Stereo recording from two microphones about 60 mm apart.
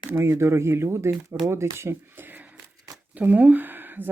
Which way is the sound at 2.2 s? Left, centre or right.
Right.